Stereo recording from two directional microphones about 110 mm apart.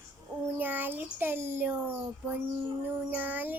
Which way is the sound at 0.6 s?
15° right (ahead or behind).